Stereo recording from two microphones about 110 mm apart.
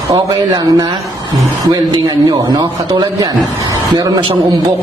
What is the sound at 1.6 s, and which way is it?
Speech, 40° right (ahead or behind).